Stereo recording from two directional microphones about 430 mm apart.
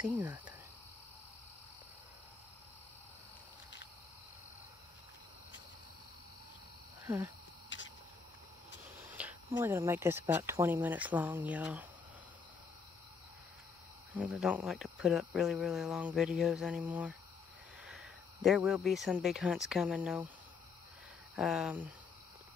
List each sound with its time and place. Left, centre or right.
0.0 s speech: centre
7.1 s speech: centre
7.7 s a sound: left
9.0 s speech: centre
14.1 s speech: centre
21.4 s speech: centre